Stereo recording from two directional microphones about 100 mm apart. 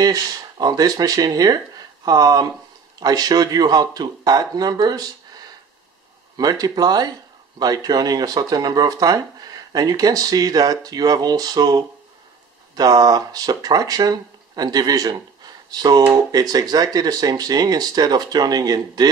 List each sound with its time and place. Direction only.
0.0 s speech: 40° right (ahead or behind)
6.3 s speech: 40° right (ahead or behind)